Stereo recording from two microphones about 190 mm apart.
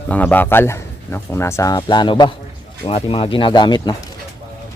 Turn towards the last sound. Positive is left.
turn(degrees=25)  # may be behind; listen again after turning